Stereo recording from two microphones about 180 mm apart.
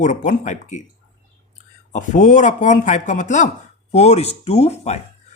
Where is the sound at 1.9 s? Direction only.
45° left (ahead or behind).